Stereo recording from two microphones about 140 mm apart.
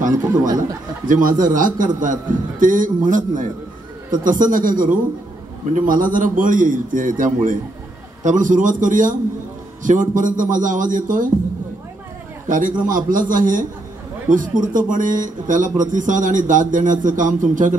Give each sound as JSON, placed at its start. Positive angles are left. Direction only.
{"t": 0.2, "sound": "speech", "side_deg": -25}
{"t": 1.0, "sound": "a man's voice", "side_deg": -70}
{"t": 12.4, "sound": "a man's voice", "side_deg": -70}